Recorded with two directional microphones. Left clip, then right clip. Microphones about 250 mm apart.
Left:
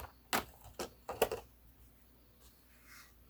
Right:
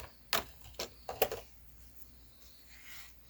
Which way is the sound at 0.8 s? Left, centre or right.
Centre.